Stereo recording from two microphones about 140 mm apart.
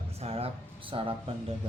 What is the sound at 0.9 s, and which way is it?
Speech, 35° right (ahead or behind).